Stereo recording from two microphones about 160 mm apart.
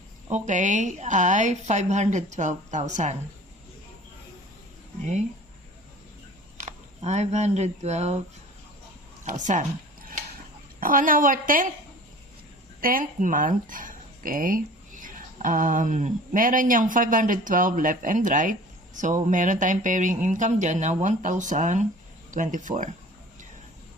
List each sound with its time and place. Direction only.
0.3 s a woman's voice: 50° right (ahead or behind)
6.7 s speech: 45° right (ahead or behind)
9.2 s a sound: 50° right (ahead or behind)
10.8 s a woman's voice: 60° right (ahead or behind)
12.8 s a woman's voice: 60° right (ahead or behind)